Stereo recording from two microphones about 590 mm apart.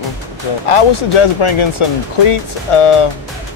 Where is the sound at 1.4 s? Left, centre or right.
Left.